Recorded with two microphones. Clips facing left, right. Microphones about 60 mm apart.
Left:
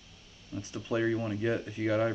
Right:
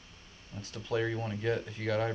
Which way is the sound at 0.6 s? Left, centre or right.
Centre.